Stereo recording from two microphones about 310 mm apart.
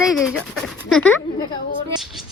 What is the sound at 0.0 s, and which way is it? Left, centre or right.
Speech, centre.